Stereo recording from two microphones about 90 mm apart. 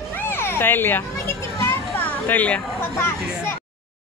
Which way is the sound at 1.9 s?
20° left (ahead or behind).